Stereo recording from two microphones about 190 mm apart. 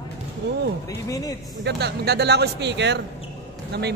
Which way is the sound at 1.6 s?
65° right (ahead or behind).